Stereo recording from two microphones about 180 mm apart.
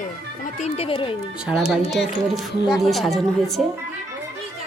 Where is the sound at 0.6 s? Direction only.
30° left (ahead or behind).